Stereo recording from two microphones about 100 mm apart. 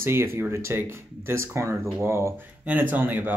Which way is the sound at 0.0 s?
25° right (ahead or behind).